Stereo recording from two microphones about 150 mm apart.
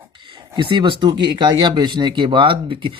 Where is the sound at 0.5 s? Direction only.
35° right (ahead or behind).